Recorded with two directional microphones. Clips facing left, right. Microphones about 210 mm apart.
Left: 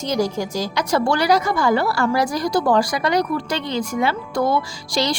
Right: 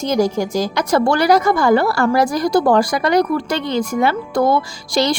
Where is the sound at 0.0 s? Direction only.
50° right (ahead or behind).